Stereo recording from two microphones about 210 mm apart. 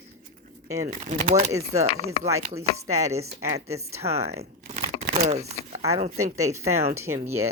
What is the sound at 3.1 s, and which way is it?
Speech, 30° right (ahead or behind).